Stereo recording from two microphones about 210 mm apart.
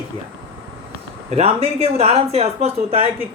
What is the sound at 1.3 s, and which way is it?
Speech, 30° right (ahead or behind).